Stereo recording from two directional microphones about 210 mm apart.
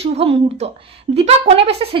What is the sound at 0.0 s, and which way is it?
A woman's voice, 30° right (ahead or behind).